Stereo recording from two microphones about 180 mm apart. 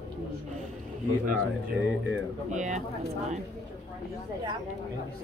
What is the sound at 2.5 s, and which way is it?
Speech, 40° right (ahead or behind).